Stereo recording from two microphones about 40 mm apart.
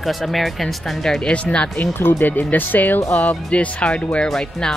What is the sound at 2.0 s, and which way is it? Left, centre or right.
Speech, left.